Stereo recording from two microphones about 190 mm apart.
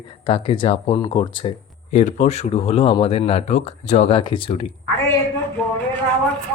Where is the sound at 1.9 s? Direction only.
40° left (ahead or behind).